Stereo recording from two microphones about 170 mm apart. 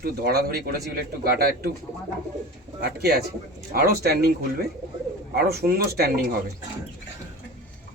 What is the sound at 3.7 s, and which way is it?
Speech, 65° right (ahead or behind).